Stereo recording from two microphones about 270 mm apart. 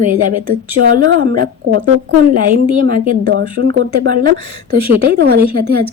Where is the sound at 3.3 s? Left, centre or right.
Right.